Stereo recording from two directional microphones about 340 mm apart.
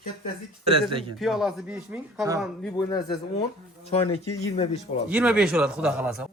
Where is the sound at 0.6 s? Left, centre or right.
Centre.